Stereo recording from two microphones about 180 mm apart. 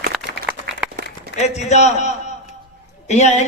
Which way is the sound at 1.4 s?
40° left (ahead or behind).